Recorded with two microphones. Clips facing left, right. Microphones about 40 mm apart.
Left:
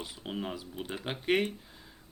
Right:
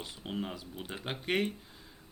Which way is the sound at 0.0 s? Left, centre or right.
Centre.